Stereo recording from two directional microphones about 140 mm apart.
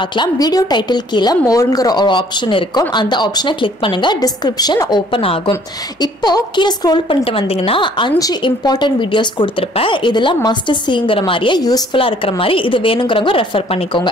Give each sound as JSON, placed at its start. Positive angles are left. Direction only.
{"t": 0.0, "sound": "a woman's voice", "side_deg": 35}
{"t": 5.5, "sound": "a woman's voice", "side_deg": 30}
{"t": 7.2, "sound": "a woman's voice", "side_deg": 45}